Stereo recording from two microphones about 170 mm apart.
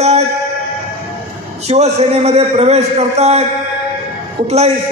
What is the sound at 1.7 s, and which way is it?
A man's voice, 40° right (ahead or behind).